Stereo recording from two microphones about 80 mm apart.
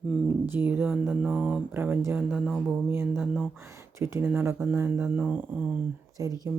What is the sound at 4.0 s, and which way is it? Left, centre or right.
Speech, right.